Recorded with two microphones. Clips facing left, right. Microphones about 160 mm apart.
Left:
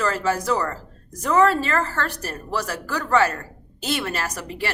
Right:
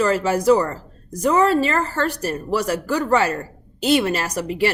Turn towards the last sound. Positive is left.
turn(degrees=-20)  # may be behind; listen again after turning